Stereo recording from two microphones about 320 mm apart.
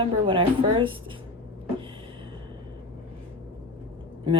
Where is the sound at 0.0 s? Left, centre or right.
Centre.